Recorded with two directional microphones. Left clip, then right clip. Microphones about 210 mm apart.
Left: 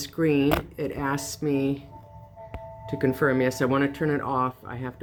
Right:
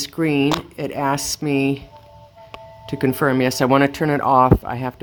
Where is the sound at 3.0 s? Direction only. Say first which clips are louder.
Right 5 dB; 45° right (ahead or behind).